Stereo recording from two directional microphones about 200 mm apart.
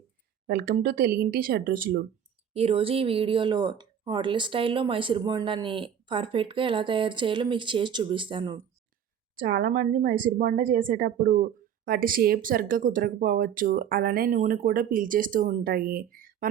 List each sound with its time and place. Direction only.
0.4 s speech: 45° right (ahead or behind)
2.5 s speech: 30° right (ahead or behind)
9.3 s speech: 45° right (ahead or behind)